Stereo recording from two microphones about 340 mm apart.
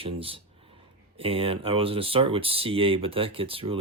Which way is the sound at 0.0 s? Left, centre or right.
Centre.